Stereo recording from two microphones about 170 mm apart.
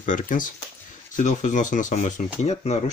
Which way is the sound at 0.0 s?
50° left (ahead or behind).